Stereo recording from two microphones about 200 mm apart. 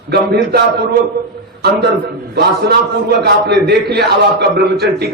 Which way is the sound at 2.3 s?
55° right (ahead or behind).